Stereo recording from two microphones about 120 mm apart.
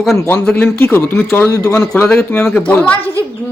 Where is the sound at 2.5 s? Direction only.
15° left (ahead or behind).